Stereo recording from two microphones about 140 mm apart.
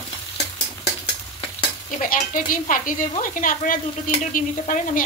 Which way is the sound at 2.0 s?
75° left (ahead or behind).